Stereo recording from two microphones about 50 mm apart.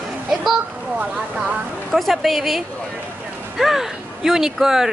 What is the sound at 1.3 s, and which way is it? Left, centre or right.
Speech, centre.